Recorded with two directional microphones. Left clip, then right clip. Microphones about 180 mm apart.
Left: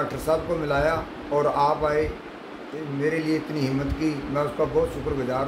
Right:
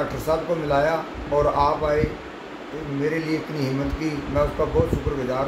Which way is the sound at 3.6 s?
10° left (ahead or behind).